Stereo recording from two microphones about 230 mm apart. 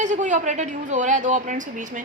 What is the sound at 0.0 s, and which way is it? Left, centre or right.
A woman's voice, right.